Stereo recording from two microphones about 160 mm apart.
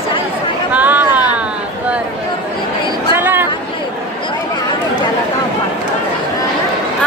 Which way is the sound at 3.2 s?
15° right (ahead or behind).